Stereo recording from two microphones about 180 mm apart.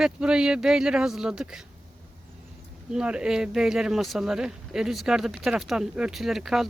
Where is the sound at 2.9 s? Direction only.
5° right (ahead or behind).